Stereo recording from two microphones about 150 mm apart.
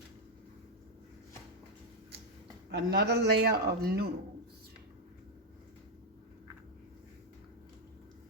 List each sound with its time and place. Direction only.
2.7 s speech: 90° right